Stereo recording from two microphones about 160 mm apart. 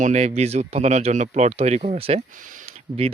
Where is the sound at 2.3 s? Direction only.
55° right (ahead or behind).